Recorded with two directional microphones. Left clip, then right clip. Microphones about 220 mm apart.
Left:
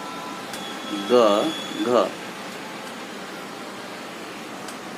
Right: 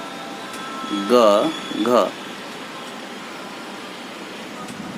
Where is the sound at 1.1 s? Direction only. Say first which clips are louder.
Right 3 dB; 20° right (ahead or behind).